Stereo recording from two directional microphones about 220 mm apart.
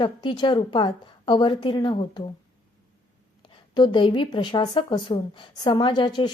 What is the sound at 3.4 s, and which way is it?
A woman's voice, 20° left (ahead or behind).